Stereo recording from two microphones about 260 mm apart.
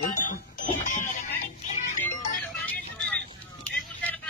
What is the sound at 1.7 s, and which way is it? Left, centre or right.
Music, left.